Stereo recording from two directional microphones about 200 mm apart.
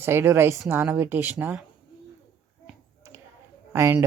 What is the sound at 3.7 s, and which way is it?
Speech, 15° right (ahead or behind).